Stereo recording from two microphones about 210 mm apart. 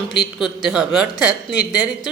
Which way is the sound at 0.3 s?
Centre (ahead or behind).